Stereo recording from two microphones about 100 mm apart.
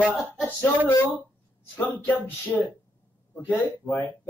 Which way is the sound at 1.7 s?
15° left (ahead or behind).